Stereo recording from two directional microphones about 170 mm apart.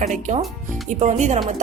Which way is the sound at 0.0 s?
40° right (ahead or behind).